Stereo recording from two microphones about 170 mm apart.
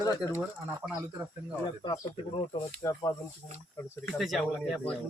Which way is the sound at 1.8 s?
25° left (ahead or behind).